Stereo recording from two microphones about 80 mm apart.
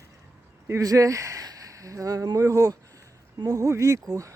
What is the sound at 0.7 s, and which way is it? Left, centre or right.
Speech, right.